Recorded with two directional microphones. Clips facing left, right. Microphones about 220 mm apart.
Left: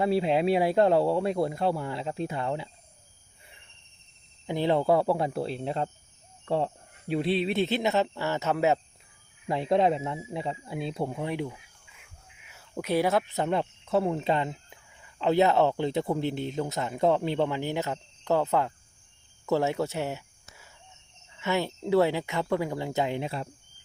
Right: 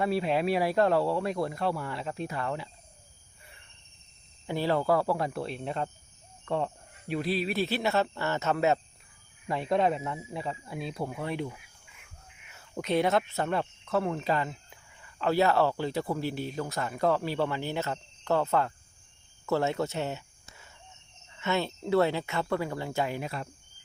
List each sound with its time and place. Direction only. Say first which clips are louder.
0.0 s speech: left 3 dB; 25° left (ahead or behind)
4.4 s speech: left 3 dB; 20° left (ahead or behind)
6.4 s a sound: left 3 dB; 30° left (ahead or behind)
7.1 s speech: left 3 dB; 25° left (ahead or behind)
9.5 s speech: left 3 dB; 25° left (ahead or behind)
19.5 s a sound: left 2 dB; 15° left (ahead or behind)
21.2 s speech: left 1 dB; 10° left (ahead or behind); by 23.5 s 30° left (ahead or behind)